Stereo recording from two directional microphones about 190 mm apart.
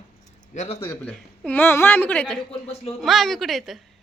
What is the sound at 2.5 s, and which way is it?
Speech, 30° left (ahead or behind).